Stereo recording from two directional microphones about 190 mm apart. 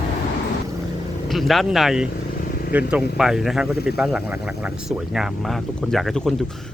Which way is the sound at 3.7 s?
55° left (ahead or behind).